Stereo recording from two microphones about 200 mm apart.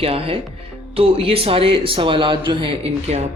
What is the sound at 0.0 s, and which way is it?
Speech, 30° right (ahead or behind).